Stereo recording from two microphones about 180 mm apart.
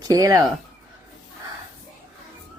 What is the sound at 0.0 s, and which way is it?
Speech, 20° right (ahead or behind).